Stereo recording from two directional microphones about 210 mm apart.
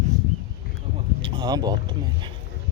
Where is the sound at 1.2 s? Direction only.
20° right (ahead or behind).